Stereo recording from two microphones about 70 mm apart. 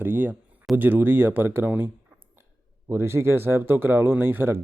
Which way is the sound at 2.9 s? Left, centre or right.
Right.